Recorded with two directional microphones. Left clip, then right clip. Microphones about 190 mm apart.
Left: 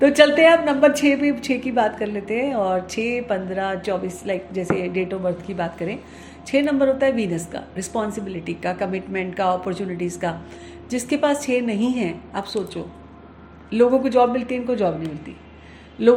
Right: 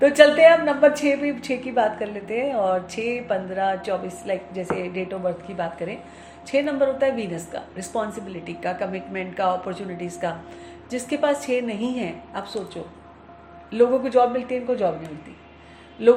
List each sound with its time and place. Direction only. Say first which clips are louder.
0.0 s a woman's voice: even; 30° left (ahead or behind)
16.0 s a woman's voice: left 1 dB; 30° left (ahead or behind)